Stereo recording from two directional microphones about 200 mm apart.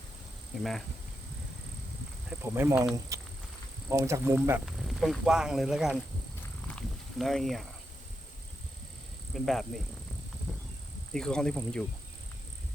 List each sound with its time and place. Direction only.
2.4 s speech: 10° right (ahead or behind)
6.4 s wild animals: 5° left (ahead or behind)
9.3 s speech: centre (ahead or behind)
10.5 s a sound: centre (ahead or behind)
11.1 s speech: 5° left (ahead or behind)